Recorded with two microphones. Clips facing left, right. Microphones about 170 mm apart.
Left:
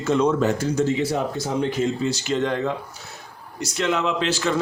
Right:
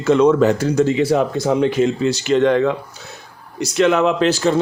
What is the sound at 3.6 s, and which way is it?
Speech, 65° right (ahead or behind).